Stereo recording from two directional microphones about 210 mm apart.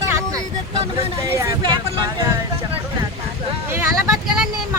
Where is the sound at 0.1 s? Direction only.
15° right (ahead or behind).